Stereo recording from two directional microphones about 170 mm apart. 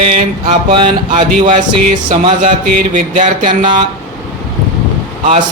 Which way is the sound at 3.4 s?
30° right (ahead or behind).